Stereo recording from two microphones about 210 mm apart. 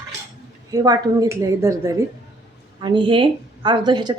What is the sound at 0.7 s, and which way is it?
A woman's voice, 20° right (ahead or behind).